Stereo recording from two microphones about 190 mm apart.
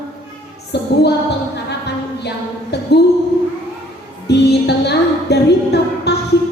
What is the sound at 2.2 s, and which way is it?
Speech, 60° left (ahead or behind).